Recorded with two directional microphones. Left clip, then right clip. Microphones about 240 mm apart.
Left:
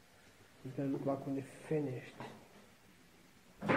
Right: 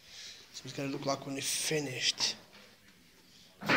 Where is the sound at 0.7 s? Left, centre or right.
Centre.